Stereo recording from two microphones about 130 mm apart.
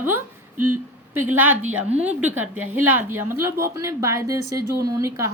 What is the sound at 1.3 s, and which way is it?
A woman's voice, 15° right (ahead or behind).